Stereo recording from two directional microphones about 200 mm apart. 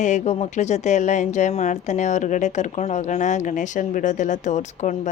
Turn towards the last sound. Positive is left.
turn(degrees=35)  # may be behind; listen again after turning